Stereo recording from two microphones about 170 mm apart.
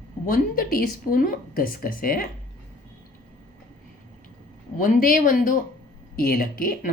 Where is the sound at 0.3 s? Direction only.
55° left (ahead or behind).